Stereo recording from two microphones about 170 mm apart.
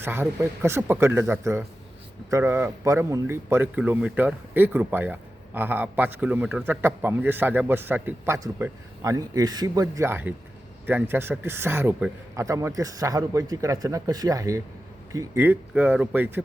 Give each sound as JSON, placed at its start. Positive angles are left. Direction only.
{"t": 0.0, "sound": "a man's voice", "side_deg": -15}